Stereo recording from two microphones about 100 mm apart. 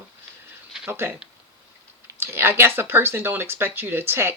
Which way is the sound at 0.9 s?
20° right (ahead or behind).